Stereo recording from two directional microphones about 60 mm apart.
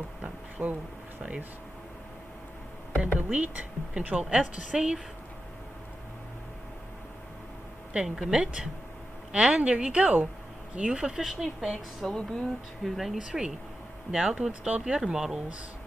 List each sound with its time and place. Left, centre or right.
0.6 s speech: right
3.0 s speech: right
4.4 s speech: centre
7.9 s speech: centre